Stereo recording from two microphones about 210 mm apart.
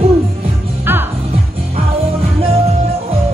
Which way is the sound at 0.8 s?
10° right (ahead or behind).